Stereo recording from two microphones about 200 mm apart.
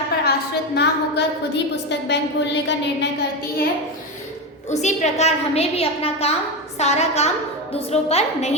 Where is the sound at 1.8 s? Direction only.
60° left (ahead or behind).